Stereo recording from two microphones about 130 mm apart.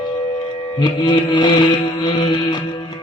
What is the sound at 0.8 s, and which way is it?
Music, 35° left (ahead or behind).